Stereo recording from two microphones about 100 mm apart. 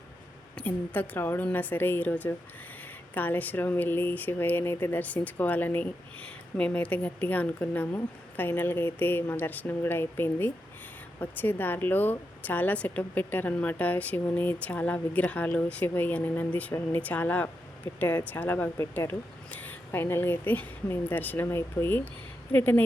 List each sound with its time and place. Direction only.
0.5 s a woman's voice: 15° left (ahead or behind)